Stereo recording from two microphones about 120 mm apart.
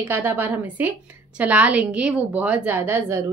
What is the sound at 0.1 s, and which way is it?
A woman's voice, 20° right (ahead or behind).